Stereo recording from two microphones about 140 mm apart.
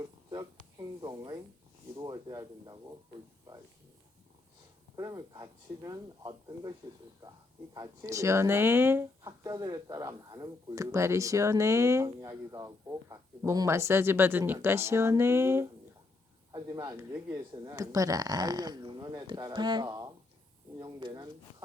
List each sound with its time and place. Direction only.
0.0 s a sound: 30° right (ahead or behind)
4.9 s speech: 25° right (ahead or behind)
9.4 s speech: 25° right (ahead or behind)
16.5 s speech: 30° right (ahead or behind)